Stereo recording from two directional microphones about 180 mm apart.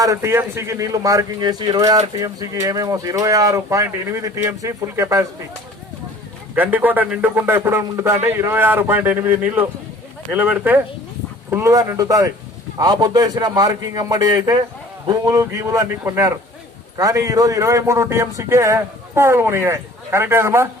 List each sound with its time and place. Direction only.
0.0 s speech: 15° right (ahead or behind)
6.5 s a man's voice: 10° right (ahead or behind)